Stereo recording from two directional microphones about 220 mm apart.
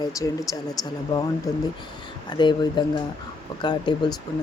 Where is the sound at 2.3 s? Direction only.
20° left (ahead or behind).